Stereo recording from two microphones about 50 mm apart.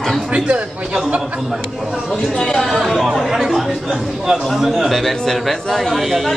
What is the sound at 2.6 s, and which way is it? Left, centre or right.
A man's voice, centre.